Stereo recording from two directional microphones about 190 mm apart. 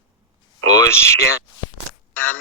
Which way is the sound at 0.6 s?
90° right.